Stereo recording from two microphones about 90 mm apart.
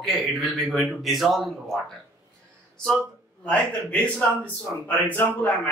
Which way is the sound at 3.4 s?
15° left (ahead or behind).